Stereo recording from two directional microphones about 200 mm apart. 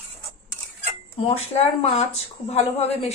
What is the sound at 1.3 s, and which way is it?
Speech, 30° left (ahead or behind).